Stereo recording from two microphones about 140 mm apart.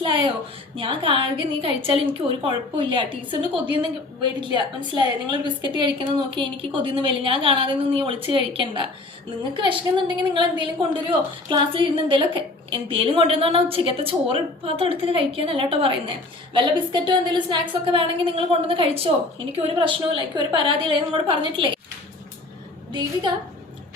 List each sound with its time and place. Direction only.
0.0 s a sound: 35° right (ahead or behind)
0.8 s a woman's voice: 40° right (ahead or behind)
22.9 s a woman's voice: 30° right (ahead or behind)